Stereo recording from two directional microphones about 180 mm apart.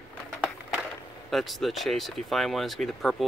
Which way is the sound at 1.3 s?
Centre (ahead or behind).